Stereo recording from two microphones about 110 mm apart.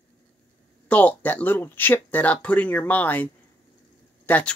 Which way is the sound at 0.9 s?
15° left (ahead or behind).